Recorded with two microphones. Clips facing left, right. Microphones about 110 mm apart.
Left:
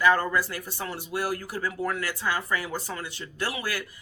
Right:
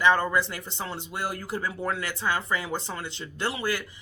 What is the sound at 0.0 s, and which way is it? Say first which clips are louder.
Speech: even; 25° right (ahead or behind).